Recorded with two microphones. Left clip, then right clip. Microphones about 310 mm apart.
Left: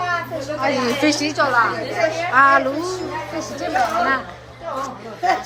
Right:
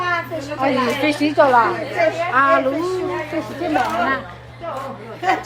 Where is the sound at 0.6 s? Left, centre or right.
Centre.